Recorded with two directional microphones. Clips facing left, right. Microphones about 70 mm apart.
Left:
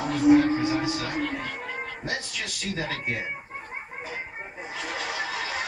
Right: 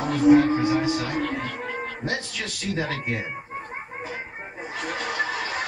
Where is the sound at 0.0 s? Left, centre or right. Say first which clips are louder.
Right 2 dB; right.